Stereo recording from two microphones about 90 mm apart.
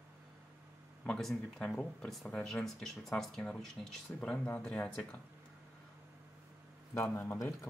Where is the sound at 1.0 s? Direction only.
10° left (ahead or behind).